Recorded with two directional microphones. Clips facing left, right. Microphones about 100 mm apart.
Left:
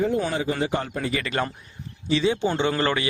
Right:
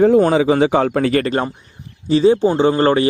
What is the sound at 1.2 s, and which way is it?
A man's voice, 35° right (ahead or behind).